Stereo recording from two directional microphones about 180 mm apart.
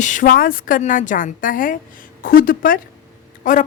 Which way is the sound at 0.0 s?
45° left (ahead or behind).